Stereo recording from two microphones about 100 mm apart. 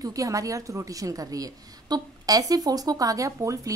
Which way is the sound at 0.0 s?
35° right (ahead or behind).